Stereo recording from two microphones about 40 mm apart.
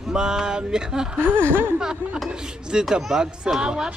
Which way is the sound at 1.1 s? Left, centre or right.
Right.